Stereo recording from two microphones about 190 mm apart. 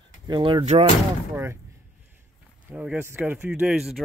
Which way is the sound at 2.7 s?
10° right (ahead or behind).